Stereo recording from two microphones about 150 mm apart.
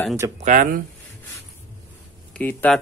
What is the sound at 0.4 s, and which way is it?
Speech, 60° right (ahead or behind).